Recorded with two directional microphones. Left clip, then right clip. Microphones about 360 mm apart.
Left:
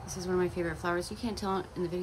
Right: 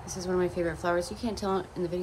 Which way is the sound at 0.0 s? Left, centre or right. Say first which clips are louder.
Right 2 dB; centre.